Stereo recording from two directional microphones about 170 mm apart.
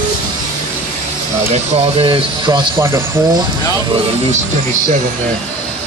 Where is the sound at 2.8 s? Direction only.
15° right (ahead or behind).